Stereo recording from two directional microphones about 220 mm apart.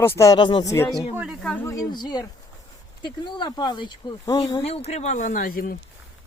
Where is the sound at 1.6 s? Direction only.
15° left (ahead or behind); by 5.7 s 40° left (ahead or behind).